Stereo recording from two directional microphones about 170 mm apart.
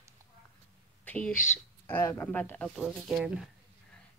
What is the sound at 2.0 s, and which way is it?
Speech, 15° left (ahead or behind).